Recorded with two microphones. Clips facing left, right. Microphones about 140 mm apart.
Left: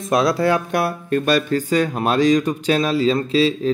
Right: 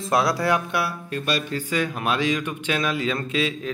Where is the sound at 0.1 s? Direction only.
25° left (ahead or behind).